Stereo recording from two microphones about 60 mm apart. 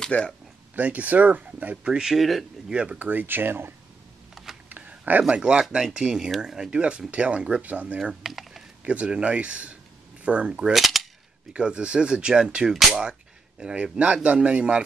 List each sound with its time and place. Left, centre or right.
0.1 s speech: left
0.7 s speech: right
1.9 s speech: centre
2.1 s speech: centre
2.7 s speech: centre
3.0 s speech: right
4.6 s a sound: right
5.3 s speech: centre
8.0 s a sound: centre
8.8 s speech: centre
10.7 s cap gun: centre
11.5 s speech: centre